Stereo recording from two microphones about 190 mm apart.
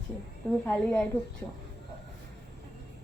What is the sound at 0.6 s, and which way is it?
Speech, 5° left (ahead or behind).